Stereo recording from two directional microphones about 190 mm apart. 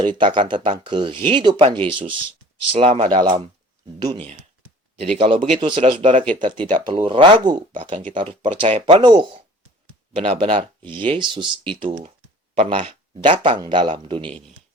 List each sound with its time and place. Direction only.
0.0 s speech: 25° right (ahead or behind)
12.5 s speech: 30° right (ahead or behind)